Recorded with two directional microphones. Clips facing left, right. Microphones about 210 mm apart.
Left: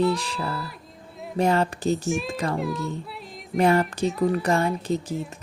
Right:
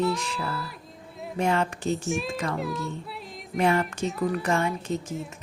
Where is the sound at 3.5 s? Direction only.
40° left (ahead or behind).